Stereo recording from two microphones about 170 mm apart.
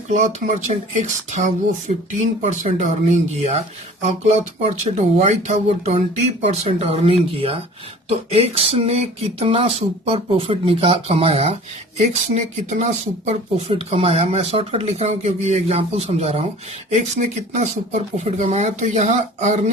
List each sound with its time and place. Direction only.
0.1 s speech: 45° right (ahead or behind)